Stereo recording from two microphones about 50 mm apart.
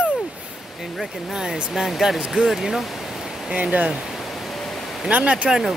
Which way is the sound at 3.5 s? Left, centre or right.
Right.